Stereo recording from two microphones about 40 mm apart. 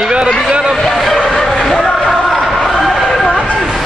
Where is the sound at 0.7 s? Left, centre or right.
Centre.